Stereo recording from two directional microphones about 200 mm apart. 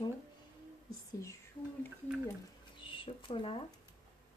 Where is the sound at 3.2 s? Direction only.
25° left (ahead or behind).